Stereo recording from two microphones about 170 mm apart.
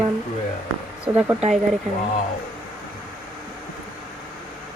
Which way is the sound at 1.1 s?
20° right (ahead or behind).